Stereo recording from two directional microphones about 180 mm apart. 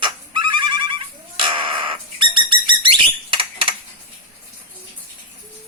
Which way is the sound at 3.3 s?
30° right (ahead or behind).